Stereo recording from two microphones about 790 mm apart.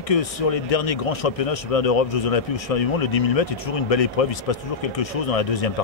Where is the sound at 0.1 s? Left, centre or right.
Left.